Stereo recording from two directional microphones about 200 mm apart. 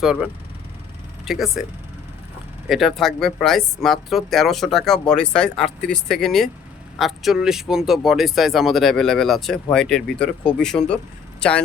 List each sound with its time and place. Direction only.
0.0 s speech: 5° right (ahead or behind)
2.6 s speech: centre (ahead or behind)